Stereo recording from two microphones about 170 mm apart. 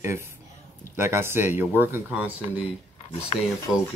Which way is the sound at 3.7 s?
5° right (ahead or behind).